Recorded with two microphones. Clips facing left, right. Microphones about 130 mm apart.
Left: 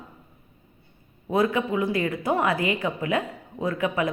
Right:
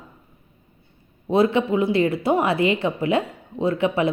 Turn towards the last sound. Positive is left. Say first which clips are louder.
# right 5 dB
turn(degrees=-25)  # may be behind; listen again after turning